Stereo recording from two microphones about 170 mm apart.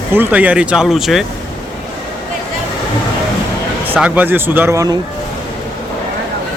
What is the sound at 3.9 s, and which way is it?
Speech, 10° right (ahead or behind).